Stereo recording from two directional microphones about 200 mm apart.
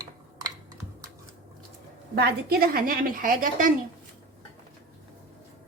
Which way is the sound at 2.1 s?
50° right (ahead or behind).